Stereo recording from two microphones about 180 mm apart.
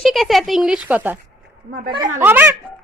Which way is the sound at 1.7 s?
55° right (ahead or behind).